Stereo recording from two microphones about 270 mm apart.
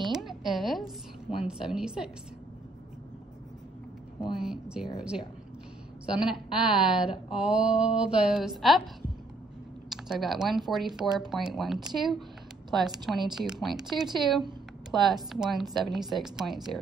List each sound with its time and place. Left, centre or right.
0.0 s a sound: centre
1.5 s speech: centre
4.2 s speech: centre
6.2 s speech: centre
9.8 s speech: centre